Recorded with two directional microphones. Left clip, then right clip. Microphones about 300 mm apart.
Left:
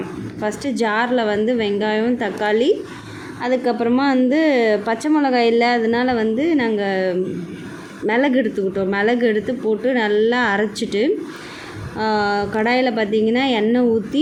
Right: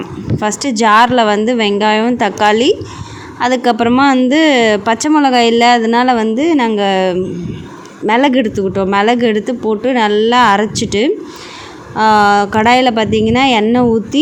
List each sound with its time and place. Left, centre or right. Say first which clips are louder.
0.4 s a woman's voice: right 8 dB; right